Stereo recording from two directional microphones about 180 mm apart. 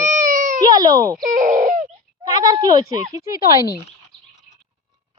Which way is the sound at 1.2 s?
45° right (ahead or behind).